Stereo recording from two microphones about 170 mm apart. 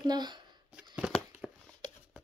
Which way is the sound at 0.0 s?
25° right (ahead or behind).